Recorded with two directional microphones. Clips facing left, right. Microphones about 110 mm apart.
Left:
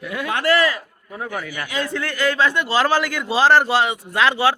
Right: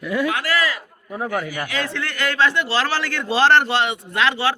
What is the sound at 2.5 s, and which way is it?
Speech, 15° left (ahead or behind).